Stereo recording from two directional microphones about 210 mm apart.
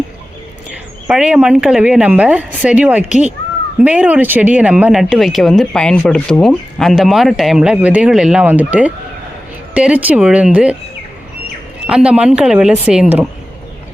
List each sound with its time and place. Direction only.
1.0 s speech: 5° right (ahead or behind)
11.9 s speech: 5° right (ahead or behind)